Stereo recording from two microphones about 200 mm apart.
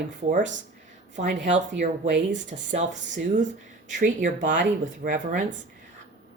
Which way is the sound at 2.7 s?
40° right (ahead or behind).